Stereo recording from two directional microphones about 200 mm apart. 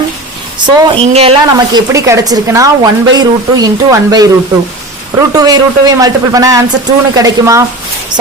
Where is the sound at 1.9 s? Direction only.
15° right (ahead or behind).